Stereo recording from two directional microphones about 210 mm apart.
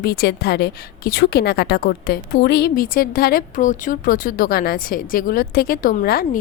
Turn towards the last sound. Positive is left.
turn(degrees=45)  # may be behind; listen again after turning